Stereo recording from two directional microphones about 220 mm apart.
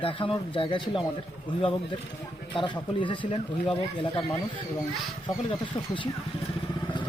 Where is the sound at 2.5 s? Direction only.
20° left (ahead or behind).